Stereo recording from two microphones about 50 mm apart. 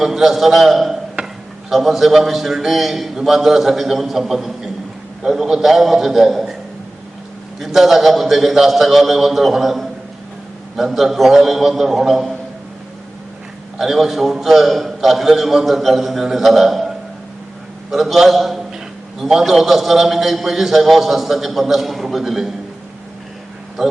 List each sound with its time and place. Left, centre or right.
0.0 s a man's voice: centre
1.2 s a sound: right
1.7 s a man's voice: centre
7.6 s a man's voice: centre
13.7 s a man's voice: centre
17.9 s a man's voice: centre